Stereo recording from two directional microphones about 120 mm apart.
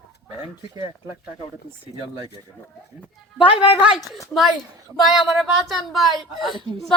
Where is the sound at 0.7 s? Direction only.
30° right (ahead or behind).